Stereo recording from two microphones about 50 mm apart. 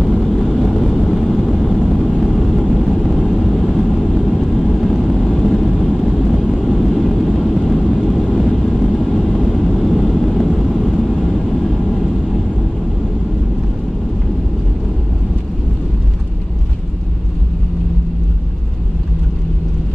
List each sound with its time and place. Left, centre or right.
0.0 s vehicle: centre